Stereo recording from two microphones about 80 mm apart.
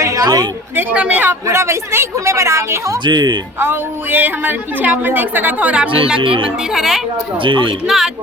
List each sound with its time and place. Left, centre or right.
0.0 s a sound: right
0.8 s a woman's voice: right
1.5 s a woman's voice: right
3.0 s speech: right
3.6 s a woman's voice: right
6.1 s speech: right
6.7 s a woman's voice: centre
7.4 s speech: right
7.9 s a woman's voice: centre